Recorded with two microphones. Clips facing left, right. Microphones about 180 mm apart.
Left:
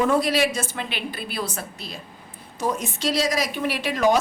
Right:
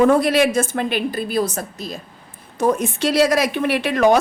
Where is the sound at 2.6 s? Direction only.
55° right (ahead or behind).